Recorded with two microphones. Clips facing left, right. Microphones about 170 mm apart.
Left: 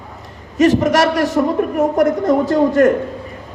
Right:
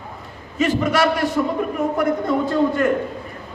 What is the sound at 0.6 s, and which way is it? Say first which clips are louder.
A woman's voice: left 6 dB; 45° left (ahead or behind).